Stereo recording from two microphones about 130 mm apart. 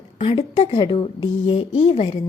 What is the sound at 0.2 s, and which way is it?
A woman's voice, 50° left (ahead or behind).